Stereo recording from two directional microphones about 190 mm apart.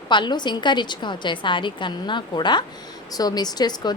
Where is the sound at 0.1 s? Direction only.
25° left (ahead or behind).